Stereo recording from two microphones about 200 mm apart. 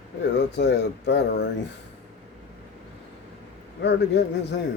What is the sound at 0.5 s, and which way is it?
Speech, 60° left (ahead or behind).